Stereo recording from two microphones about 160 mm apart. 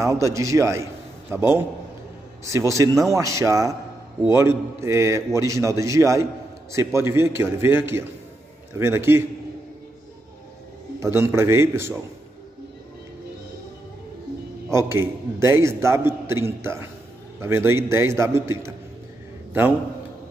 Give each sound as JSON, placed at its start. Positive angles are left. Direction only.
{"t": 0.0, "sound": "a man's voice", "side_deg": -20}
{"t": 3.0, "sound": "a man's voice", "side_deg": -20}
{"t": 11.1, "sound": "a man's voice", "side_deg": -15}
{"t": 14.7, "sound": "a man's voice", "side_deg": -15}